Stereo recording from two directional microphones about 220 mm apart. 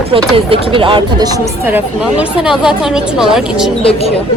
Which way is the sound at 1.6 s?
5° right (ahead or behind).